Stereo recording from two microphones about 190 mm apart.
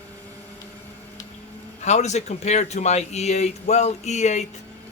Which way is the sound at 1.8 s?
35° left (ahead or behind).